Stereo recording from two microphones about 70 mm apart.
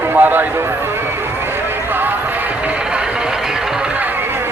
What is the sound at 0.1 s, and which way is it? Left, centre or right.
Clip-clop, right.